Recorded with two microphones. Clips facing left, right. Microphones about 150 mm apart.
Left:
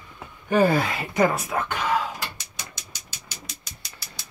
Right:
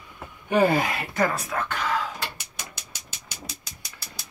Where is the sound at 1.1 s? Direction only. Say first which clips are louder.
Left 4 dB; 20° left (ahead or behind).